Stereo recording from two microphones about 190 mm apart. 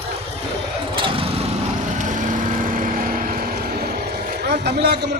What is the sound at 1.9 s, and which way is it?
Vehicle, 40° right (ahead or behind).